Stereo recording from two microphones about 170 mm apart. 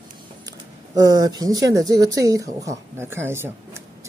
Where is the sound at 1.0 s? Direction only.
20° right (ahead or behind).